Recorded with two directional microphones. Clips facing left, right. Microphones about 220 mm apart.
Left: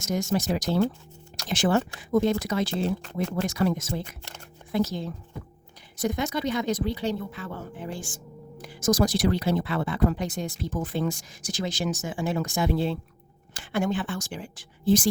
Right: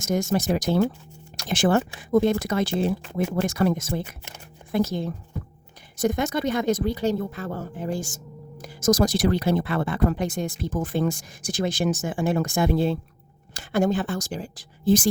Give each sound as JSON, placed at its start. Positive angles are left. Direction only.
{"t": 0.0, "sound": "speech", "side_deg": -50}